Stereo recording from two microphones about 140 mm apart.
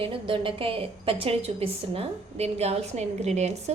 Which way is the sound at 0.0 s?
40° right (ahead or behind).